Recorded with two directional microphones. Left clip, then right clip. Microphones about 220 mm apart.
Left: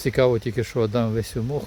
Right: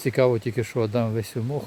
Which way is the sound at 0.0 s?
10° left (ahead or behind).